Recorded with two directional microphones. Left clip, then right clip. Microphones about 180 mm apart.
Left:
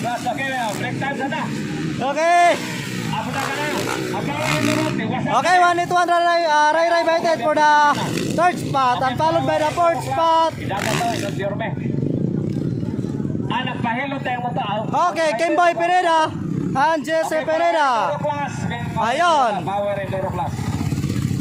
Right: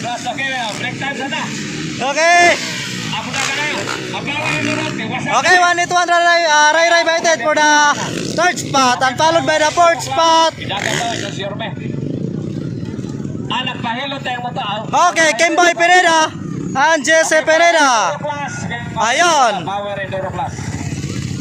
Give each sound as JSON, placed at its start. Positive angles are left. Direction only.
{"t": 2.0, "sound": "speech", "side_deg": 5}
{"t": 5.3, "sound": "speech", "side_deg": 10}
{"t": 13.5, "sound": "a sound", "side_deg": -20}
{"t": 14.9, "sound": "speech", "side_deg": -5}